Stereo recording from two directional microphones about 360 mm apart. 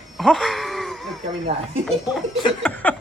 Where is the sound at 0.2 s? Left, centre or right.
Centre.